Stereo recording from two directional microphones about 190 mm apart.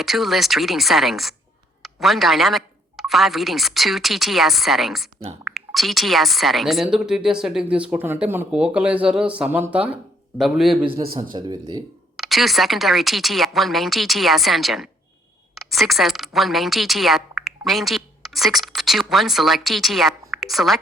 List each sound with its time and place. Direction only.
0.0 s speech: centre (ahead or behind)
10.8 s speech: 30° right (ahead or behind)
12.1 s a woman's voice: centre (ahead or behind)
20.3 s a sound: centre (ahead or behind)